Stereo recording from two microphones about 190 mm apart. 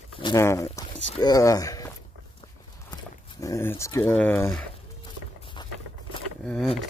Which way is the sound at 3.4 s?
15° left (ahead or behind).